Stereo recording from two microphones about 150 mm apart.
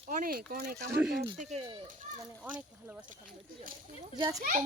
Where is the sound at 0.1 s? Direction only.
70° right (ahead or behind); by 0.8 s 85° right.